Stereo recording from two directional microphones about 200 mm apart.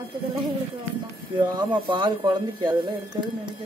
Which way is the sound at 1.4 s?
20° right (ahead or behind).